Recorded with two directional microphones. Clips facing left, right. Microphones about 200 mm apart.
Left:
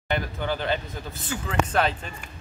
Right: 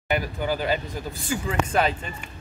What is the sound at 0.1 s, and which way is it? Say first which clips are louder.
Speech: right 2 dB; 10° right (ahead or behind).